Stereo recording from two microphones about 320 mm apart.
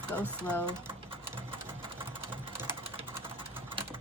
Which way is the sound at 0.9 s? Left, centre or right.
Centre.